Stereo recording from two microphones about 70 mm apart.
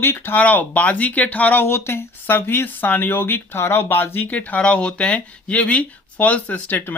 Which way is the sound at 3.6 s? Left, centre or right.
Left.